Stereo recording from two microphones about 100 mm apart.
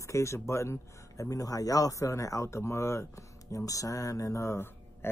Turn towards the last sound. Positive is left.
turn(degrees=25)  # may be behind; listen again after turning